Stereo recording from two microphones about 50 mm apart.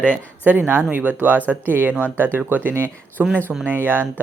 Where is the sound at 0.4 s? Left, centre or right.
Right.